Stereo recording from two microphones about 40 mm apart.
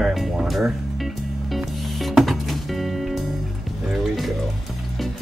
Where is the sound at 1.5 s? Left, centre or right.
Centre.